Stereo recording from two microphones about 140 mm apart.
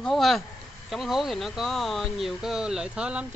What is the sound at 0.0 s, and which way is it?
Speech, centre (ahead or behind).